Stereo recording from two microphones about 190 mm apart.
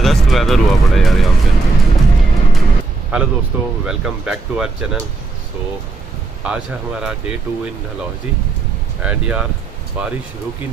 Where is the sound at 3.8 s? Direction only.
5° right (ahead or behind).